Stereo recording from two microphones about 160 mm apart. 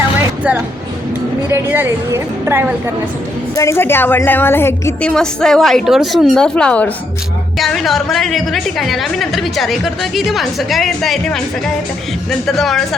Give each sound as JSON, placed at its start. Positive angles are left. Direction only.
{"t": 1.5, "sound": "a woman's voice", "side_deg": -15}
{"t": 3.5, "sound": "a woman's voice", "side_deg": 20}
{"t": 5.1, "sound": "a woman's voice", "side_deg": 5}